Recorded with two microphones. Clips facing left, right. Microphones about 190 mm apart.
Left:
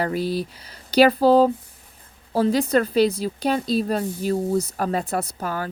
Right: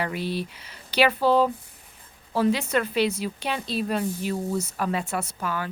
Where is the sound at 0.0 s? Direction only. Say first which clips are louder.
Left 5 dB; 40° left (ahead or behind).